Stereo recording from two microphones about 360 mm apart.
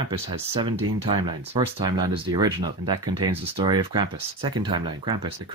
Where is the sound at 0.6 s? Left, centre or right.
Centre.